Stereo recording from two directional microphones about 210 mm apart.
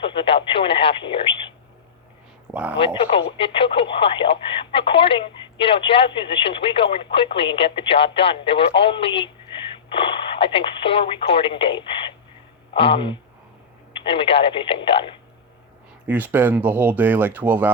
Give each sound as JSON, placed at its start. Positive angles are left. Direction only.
{"t": 0.0, "sound": "radio", "side_deg": 25}
{"t": 2.5, "sound": "speech", "side_deg": -5}
{"t": 3.1, "sound": "speech", "side_deg": 25}
{"t": 16.0, "sound": "speech", "side_deg": -10}